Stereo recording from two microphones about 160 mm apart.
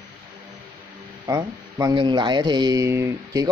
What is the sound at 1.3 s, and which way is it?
Speech, 20° right (ahead or behind).